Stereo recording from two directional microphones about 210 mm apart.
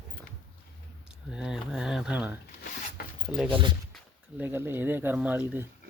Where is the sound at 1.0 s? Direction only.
5° right (ahead or behind).